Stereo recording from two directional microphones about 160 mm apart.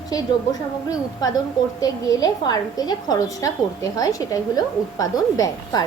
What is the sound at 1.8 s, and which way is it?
A woman's voice, 25° left (ahead or behind).